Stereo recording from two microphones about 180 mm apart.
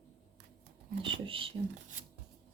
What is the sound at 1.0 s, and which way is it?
Whispering, 30° right (ahead or behind).